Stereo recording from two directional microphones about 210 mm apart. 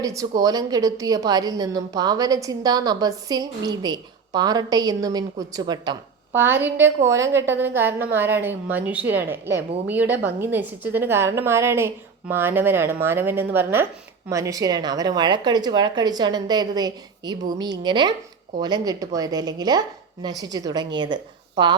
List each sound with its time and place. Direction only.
0.0 s a woman's voice: 15° right (ahead or behind)